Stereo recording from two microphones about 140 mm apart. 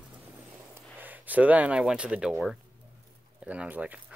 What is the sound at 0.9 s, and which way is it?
Speech, 10° right (ahead or behind).